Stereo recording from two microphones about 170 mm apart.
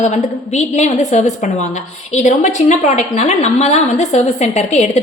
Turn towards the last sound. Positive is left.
turn(degrees=40)  # may be behind; listen again after turning